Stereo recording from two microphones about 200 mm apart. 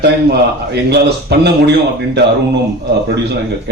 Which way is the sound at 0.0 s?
55° right (ahead or behind).